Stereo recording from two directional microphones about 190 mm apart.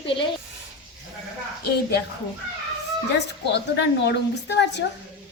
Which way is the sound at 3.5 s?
65° left (ahead or behind).